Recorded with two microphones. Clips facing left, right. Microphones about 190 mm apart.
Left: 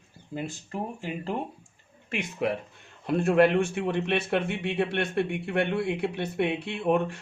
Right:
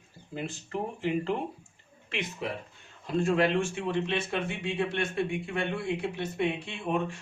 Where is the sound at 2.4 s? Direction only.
60° left (ahead or behind).